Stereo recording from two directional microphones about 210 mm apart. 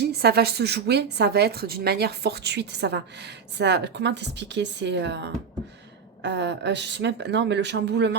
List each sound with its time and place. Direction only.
0.0 s a woman's voice: 50° right (ahead or behind)